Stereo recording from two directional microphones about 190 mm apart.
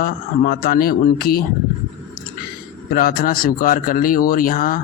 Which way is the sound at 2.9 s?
50° left (ahead or behind).